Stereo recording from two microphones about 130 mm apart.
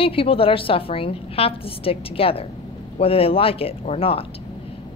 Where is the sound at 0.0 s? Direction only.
45° left (ahead or behind).